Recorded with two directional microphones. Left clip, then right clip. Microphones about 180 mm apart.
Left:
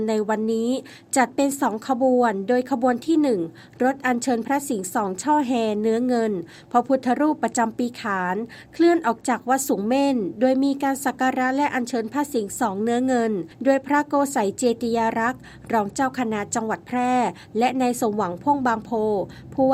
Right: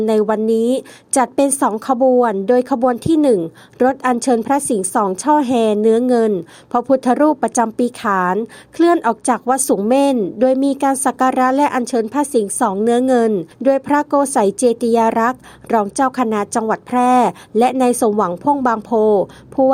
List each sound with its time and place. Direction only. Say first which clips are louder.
0.0 s a woman's voice: right 8 dB; 35° right (ahead or behind)